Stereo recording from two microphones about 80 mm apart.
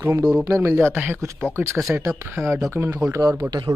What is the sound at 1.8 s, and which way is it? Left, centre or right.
Speech, centre.